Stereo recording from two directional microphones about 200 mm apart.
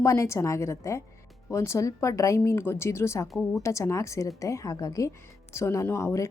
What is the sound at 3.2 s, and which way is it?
Speech, centre (ahead or behind).